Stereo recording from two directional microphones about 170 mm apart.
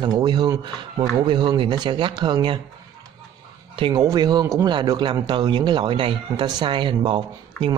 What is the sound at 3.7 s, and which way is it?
A man's voice, 25° right (ahead or behind).